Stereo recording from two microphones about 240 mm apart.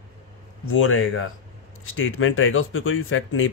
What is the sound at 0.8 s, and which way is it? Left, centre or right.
Speech, left.